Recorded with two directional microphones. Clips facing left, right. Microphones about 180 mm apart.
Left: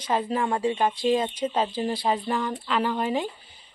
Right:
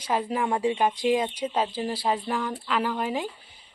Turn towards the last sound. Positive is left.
turn(degrees=-5)  # may be behind; listen again after turning